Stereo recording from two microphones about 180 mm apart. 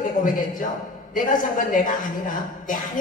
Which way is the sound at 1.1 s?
50° left (ahead or behind).